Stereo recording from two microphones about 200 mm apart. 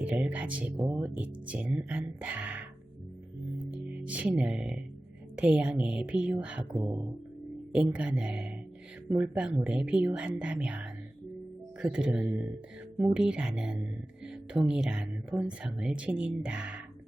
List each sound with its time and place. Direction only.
0.0 s speech: 5° right (ahead or behind)
0.9 s speech: 20° right (ahead or behind)
1.1 s speech: 5° right (ahead or behind)
3.8 s speech: 5° right (ahead or behind)